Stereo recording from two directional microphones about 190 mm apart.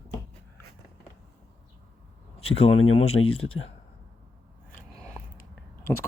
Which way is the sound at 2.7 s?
90° left.